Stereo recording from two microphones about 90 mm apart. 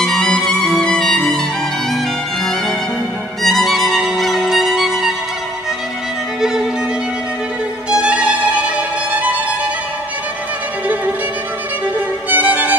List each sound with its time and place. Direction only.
0.0 s music: 5° left (ahead or behind)
3.4 s music: centre (ahead or behind)
6.4 s violin: 5° right (ahead or behind)
7.9 s music: 10° right (ahead or behind)
12.3 s music: 20° right (ahead or behind)